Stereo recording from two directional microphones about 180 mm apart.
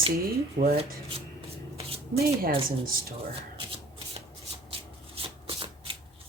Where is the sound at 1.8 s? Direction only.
35° right (ahead or behind).